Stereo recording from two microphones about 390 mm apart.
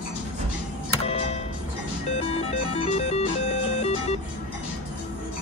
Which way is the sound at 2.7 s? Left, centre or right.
Centre.